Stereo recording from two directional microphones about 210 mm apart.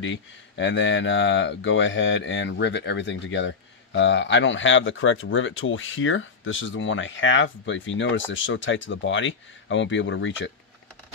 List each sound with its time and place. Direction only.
0.0 s speech: 60° left (ahead or behind)